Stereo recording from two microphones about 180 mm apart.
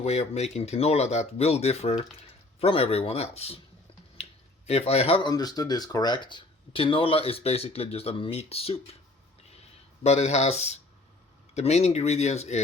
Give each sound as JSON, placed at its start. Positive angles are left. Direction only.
{"t": 0.0, "sound": "speech", "side_deg": 35}
{"t": 4.2, "sound": "a sound", "side_deg": 35}
{"t": 5.3, "sound": "speech", "side_deg": 20}
{"t": 10.0, "sound": "speech", "side_deg": 40}